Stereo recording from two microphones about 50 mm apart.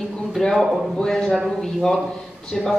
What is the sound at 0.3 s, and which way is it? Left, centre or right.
A man's voice, centre.